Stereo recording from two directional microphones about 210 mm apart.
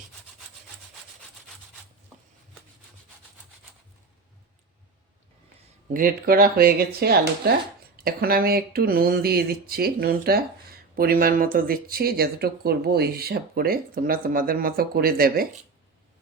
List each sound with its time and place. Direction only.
5.9 s speech: 45° right (ahead or behind)